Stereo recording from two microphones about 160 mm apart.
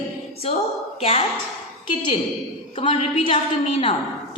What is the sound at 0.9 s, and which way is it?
A woman's voice, 40° left (ahead or behind).